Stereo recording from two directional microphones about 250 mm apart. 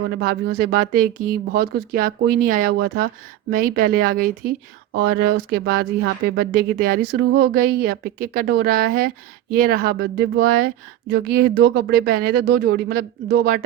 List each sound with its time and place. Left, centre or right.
0.2 s speech: right